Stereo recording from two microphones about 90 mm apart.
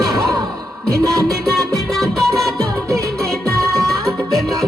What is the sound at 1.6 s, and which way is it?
Music, 5° left (ahead or behind).